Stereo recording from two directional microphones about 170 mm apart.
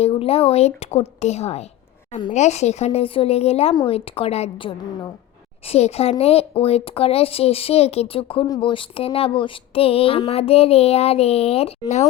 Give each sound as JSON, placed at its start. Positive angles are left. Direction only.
{"t": 0.0, "sound": "speech", "side_deg": 35}